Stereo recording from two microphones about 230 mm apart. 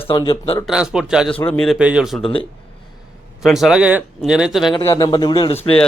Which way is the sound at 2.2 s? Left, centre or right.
Left.